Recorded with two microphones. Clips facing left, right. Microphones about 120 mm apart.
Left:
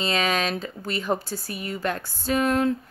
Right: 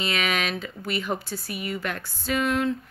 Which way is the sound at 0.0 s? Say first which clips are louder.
Left 3 dB; 30° left (ahead or behind).